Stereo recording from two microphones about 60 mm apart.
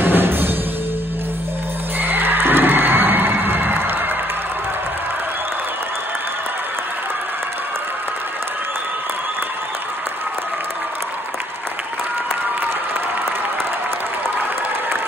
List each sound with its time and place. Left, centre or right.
0.0 s music: right
2.0 s neigh: right